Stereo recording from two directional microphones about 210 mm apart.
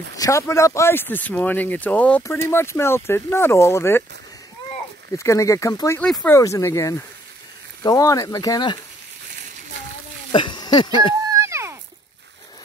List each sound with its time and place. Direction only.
0.1 s speech: 15° left (ahead or behind)
5.1 s speech: 15° left (ahead or behind)
10.3 s speech: 20° left (ahead or behind)
11.3 s a sound: 15° right (ahead or behind)